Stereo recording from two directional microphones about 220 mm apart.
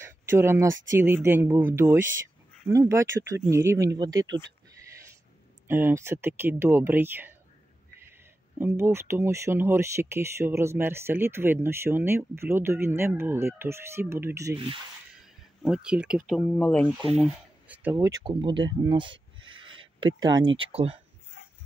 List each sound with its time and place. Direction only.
0.0 s a sound: 10° right (ahead or behind)
0.8 s speech: 10° right (ahead or behind)
5.7 s speech: 10° right (ahead or behind)
8.5 s speech: 10° right (ahead or behind)
15.6 s speech: 5° right (ahead or behind)
18.2 s speech: 20° right (ahead or behind)
19.4 s a sound: 20° right (ahead or behind)
20.3 s speech: 20° right (ahead or behind)